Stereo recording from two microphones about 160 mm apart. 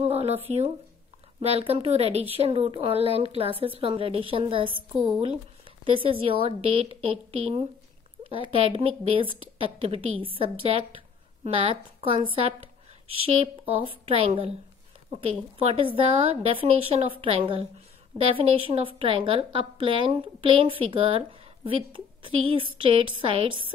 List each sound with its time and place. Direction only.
0.0 s a sound: 40° right (ahead or behind)
1.4 s a woman's voice: 35° right (ahead or behind)
5.9 s a woman's voice: 35° right (ahead or behind)
14.0 s a woman's voice: 35° right (ahead or behind)
15.6 s a woman's voice: 35° right (ahead or behind)